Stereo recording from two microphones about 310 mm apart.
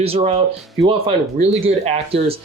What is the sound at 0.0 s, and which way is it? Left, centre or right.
Speech, centre.